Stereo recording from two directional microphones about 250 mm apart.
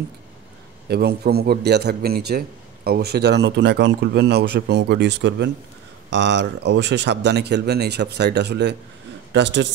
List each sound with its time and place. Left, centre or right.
0.8 s a man's voice: right